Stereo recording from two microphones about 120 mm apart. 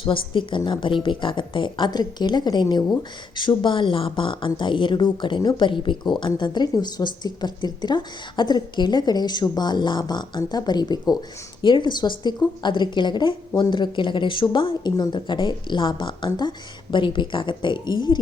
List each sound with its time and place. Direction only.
0.0 s speech: 45° left (ahead or behind)